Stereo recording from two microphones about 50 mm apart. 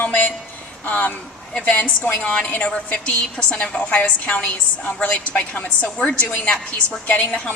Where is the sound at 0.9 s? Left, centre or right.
Left.